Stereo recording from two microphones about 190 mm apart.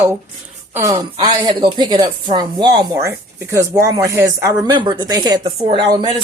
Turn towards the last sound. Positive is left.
turn(degrees=-25)  # may be behind; listen again after turning